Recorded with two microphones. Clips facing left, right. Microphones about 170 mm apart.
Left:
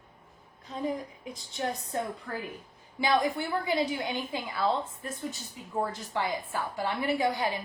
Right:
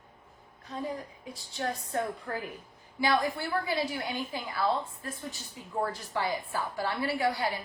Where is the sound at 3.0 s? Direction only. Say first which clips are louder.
Left 1 dB; 20° left (ahead or behind).